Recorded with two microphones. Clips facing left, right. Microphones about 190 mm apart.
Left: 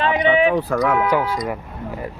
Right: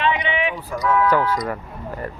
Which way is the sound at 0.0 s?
40° left (ahead or behind).